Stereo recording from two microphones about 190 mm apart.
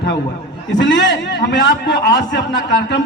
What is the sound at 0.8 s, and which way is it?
A man's voice, 70° left (ahead or behind).